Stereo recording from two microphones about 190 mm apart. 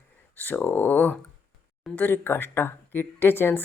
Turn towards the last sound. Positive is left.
turn(degrees=10)  # may be behind; listen again after turning